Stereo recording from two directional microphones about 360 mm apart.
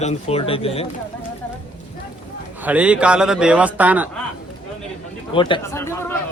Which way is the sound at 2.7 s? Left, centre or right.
Centre.